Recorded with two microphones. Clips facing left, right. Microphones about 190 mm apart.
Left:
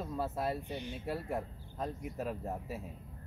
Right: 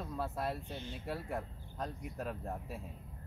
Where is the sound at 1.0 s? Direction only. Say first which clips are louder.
Left 3 dB; centre (ahead or behind).